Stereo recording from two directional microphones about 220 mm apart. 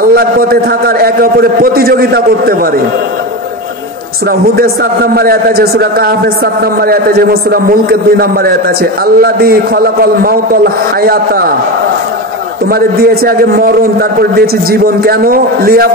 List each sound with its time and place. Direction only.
0.0 s a man's voice: 45° right (ahead or behind)
4.3 s a man's voice: 45° right (ahead or behind)
12.6 s a man's voice: 45° right (ahead or behind)